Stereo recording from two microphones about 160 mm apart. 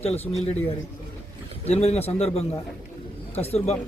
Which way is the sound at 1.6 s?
40° left (ahead or behind).